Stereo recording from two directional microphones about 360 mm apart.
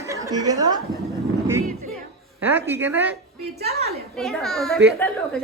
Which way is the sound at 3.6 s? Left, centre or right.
Right.